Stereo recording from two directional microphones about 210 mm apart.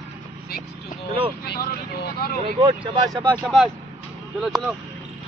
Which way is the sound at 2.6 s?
25° right (ahead or behind).